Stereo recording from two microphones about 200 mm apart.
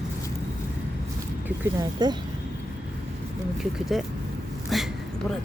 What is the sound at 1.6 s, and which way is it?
Speech, 20° right (ahead or behind).